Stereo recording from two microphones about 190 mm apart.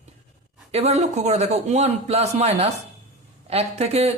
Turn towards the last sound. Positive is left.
turn(degrees=-35)  # may be behind; listen again after turning